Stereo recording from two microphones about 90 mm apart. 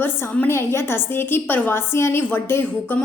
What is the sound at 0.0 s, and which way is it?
A woman's voice, 25° left (ahead or behind).